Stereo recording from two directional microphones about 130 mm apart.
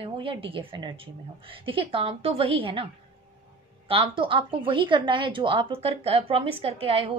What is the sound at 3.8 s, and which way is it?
A woman's voice, 45° right (ahead or behind).